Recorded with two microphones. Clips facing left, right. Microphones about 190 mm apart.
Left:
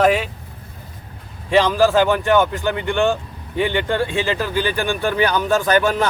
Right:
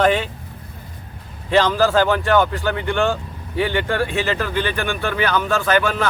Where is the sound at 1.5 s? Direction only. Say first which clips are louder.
Left 1 dB; 10° left (ahead or behind).